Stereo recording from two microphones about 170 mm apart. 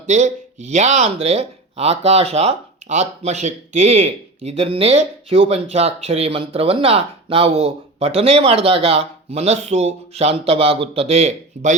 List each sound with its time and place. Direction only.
0.1 s speech: 45° right (ahead or behind)